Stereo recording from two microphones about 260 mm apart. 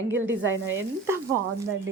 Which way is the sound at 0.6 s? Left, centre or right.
Centre.